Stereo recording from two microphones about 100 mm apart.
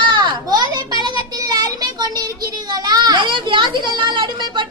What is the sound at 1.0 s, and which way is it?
Child singing, 45° right (ahead or behind).